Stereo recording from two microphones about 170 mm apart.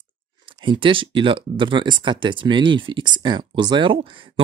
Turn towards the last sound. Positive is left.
turn(degrees=-30)  # may be behind; listen again after turning